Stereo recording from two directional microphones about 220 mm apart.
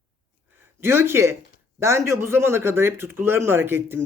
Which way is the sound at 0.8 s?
10° right (ahead or behind).